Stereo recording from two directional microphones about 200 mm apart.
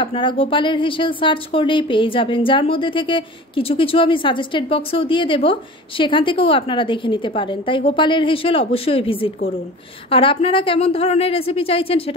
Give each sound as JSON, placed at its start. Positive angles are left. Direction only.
{"t": 0.0, "sound": "speech", "side_deg": 25}